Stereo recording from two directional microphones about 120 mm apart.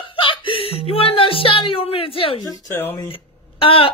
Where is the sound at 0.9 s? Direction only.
50° left (ahead or behind).